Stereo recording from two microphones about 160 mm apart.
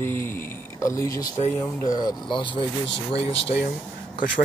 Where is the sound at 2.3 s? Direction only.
30° left (ahead or behind).